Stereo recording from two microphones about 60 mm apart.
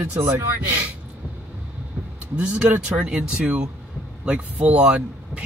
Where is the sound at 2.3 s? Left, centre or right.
Centre.